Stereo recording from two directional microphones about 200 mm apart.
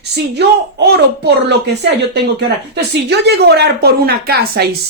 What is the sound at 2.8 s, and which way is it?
A woman's voice, 55° right (ahead or behind).